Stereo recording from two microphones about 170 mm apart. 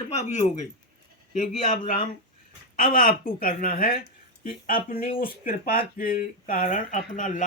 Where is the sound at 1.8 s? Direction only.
55° left (ahead or behind).